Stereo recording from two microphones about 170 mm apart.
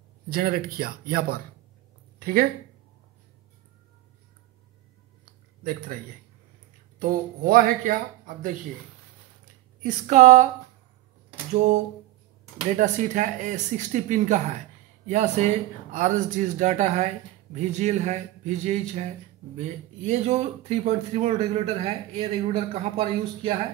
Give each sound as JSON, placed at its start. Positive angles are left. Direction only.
{"t": 0.3, "sound": "speech", "side_deg": -60}
{"t": 2.1, "sound": "a sound", "side_deg": -60}
{"t": 5.6, "sound": "speech", "side_deg": -55}
{"t": 7.0, "sound": "speech", "side_deg": -55}
{"t": 9.8, "sound": "speech", "side_deg": -45}
{"t": 11.5, "sound": "speech", "side_deg": -45}